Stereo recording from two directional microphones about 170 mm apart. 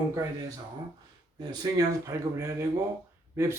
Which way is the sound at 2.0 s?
15° right (ahead or behind).